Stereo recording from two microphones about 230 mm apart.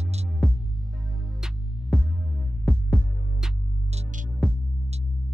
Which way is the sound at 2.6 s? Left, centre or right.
Centre.